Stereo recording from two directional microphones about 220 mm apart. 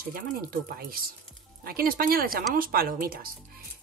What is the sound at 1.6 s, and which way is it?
A woman's voice, 40° right (ahead or behind).